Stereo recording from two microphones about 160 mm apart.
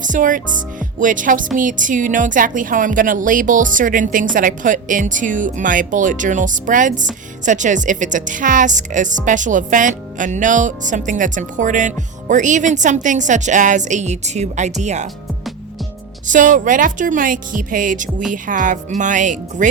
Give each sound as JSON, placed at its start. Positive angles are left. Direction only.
{"t": 0.0, "sound": "a woman's voice", "side_deg": -55}
{"t": 16.2, "sound": "a woman's voice", "side_deg": -55}